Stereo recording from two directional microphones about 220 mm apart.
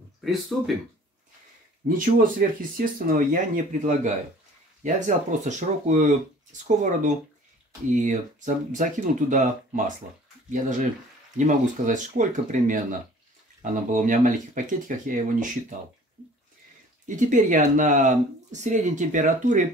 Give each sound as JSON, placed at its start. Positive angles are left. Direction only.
{"t": 0.5, "sound": "speech", "side_deg": 0}
{"t": 1.9, "sound": "speech", "side_deg": -40}
{"t": 17.1, "sound": "speech", "side_deg": -35}